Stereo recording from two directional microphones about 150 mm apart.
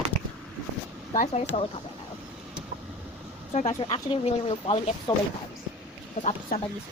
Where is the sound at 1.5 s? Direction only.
45° left (ahead or behind).